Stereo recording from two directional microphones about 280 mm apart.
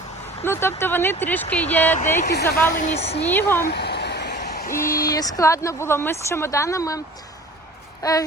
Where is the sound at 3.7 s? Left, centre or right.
Left.